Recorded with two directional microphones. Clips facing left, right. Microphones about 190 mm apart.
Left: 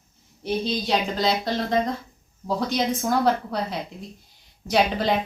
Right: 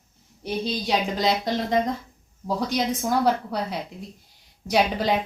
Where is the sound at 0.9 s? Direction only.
15° right (ahead or behind).